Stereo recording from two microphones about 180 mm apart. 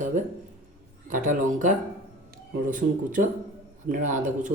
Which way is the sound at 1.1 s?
50° right (ahead or behind).